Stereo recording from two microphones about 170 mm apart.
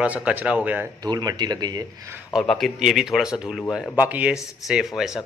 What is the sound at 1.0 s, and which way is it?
Speech, 25° right (ahead or behind).